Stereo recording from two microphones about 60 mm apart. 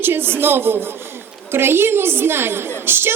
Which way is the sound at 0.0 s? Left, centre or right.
Right.